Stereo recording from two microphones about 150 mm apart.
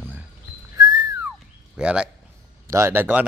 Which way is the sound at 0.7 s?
20° right (ahead or behind).